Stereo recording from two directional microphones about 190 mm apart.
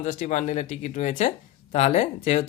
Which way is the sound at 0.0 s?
40° left (ahead or behind).